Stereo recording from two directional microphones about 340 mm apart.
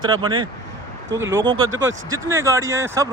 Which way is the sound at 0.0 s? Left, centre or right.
Centre.